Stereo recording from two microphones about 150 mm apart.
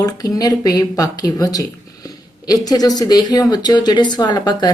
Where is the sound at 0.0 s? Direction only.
25° left (ahead or behind).